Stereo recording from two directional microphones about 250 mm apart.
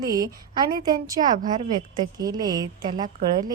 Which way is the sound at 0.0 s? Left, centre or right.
Centre.